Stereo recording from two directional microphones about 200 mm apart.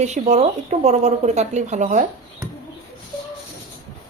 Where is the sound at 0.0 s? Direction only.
35° right (ahead or behind).